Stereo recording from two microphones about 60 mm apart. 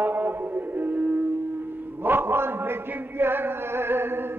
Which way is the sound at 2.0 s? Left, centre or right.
Right.